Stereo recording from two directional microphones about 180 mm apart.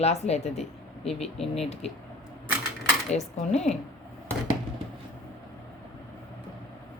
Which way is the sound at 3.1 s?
40° left (ahead or behind).